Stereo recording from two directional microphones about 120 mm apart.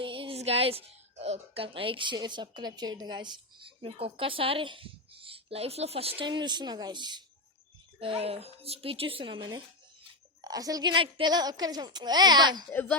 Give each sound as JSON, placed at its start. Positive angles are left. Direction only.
{"t": 0.0, "sound": "speech", "side_deg": -45}
{"t": 6.2, "sound": "a child's voice", "side_deg": -40}
{"t": 7.9, "sound": "speech", "side_deg": -55}
{"t": 10.4, "sound": "a child's voice", "side_deg": -30}
{"t": 12.7, "sound": "speech", "side_deg": 15}